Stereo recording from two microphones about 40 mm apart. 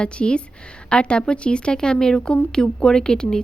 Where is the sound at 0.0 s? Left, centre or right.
Left.